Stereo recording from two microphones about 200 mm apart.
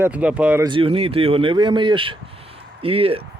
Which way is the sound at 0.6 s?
25° right (ahead or behind).